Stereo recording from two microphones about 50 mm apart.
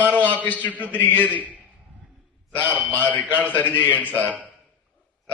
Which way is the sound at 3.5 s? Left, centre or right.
Left.